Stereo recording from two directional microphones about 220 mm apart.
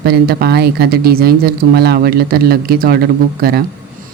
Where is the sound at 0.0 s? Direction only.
45° right (ahead or behind).